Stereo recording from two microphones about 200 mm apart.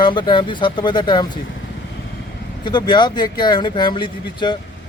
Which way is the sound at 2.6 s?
20° left (ahead or behind).